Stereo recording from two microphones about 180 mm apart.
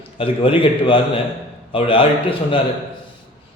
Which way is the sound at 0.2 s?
30° left (ahead or behind).